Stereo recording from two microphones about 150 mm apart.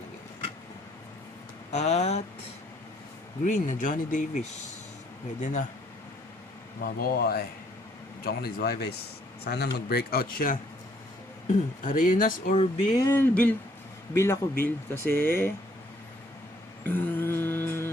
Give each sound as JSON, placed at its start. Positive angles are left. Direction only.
{"t": 1.7, "sound": "speech", "side_deg": 50}
{"t": 3.4, "sound": "speech", "side_deg": 55}
{"t": 6.8, "sound": "speech", "side_deg": 85}
{"t": 11.4, "sound": "speech", "side_deg": 60}
{"t": 12.7, "sound": "speech", "side_deg": 30}
{"t": 13.1, "sound": "speech", "side_deg": 15}
{"t": 16.8, "sound": "mantra", "side_deg": 10}